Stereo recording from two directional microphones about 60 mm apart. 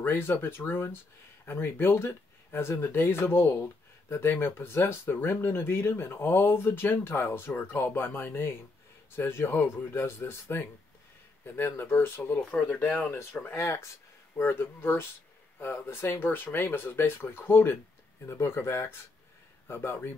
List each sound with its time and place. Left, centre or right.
0.0 s speech: left
13.1 s speech: left